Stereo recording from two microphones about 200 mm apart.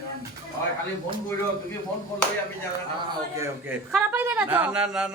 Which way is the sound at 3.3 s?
15° right (ahead or behind).